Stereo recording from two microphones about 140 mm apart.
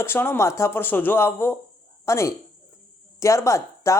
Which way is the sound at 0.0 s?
15° left (ahead or behind).